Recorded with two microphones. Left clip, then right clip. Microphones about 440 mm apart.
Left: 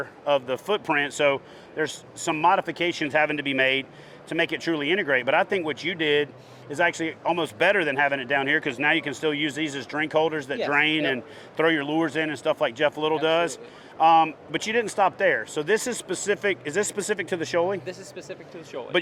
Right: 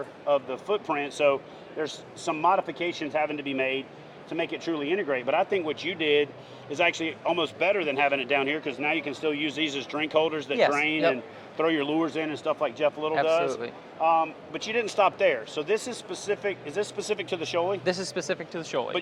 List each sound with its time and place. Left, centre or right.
0.3 s speech: left
13.2 s speech: left
14.7 s speech: left
17.8 s speech: right